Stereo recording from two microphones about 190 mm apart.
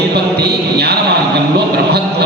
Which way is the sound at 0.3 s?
60° right (ahead or behind).